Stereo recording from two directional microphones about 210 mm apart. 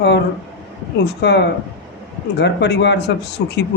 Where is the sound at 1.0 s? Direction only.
50° left (ahead or behind).